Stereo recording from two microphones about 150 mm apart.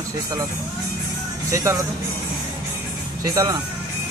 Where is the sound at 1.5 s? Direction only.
20° right (ahead or behind).